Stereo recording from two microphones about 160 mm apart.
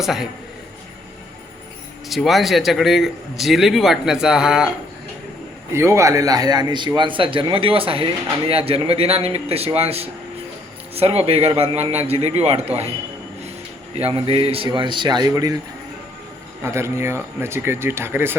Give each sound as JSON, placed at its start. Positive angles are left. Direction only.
{"t": 0.0, "sound": "a man's voice", "side_deg": 0}
{"t": 2.0, "sound": "a man's voice", "side_deg": 0}
{"t": 5.7, "sound": "a man's voice", "side_deg": -15}
{"t": 14.1, "sound": "speech", "side_deg": -35}
{"t": 16.6, "sound": "speech", "side_deg": -15}